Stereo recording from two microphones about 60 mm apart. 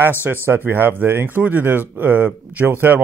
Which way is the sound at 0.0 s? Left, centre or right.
Right.